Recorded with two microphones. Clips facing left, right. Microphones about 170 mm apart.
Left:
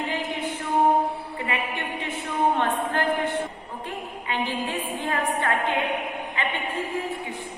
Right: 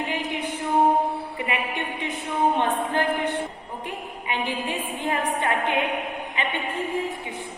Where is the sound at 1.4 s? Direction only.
20° right (ahead or behind).